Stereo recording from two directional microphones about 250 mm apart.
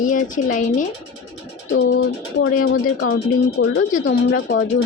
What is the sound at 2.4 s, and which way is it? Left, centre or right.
Speech, left.